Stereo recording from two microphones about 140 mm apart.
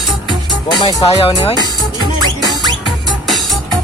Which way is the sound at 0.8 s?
40° left (ahead or behind).